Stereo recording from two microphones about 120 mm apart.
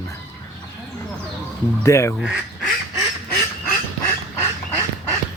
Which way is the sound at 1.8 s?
25° left (ahead or behind).